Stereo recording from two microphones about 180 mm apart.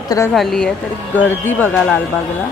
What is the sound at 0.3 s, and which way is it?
Speech, 5° left (ahead or behind).